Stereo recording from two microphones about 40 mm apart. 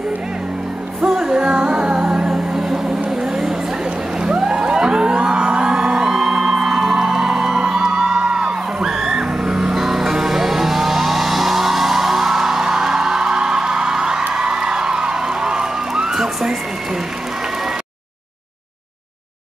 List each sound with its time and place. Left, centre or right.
1.0 s music: centre